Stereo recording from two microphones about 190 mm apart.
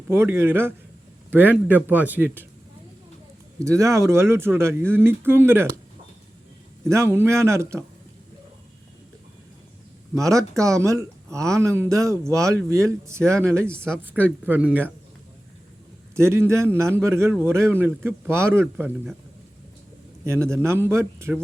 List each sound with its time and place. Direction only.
0.1 s speech: 15° right (ahead or behind)
3.6 s speech: 15° right (ahead or behind)
6.8 s speech: 15° right (ahead or behind)
10.2 s speech: 15° right (ahead or behind)
13.7 s speech: 5° left (ahead or behind)
14.0 s speech: 10° right (ahead or behind)
16.1 s speech: 15° right (ahead or behind)
20.2 s speech: 15° right (ahead or behind)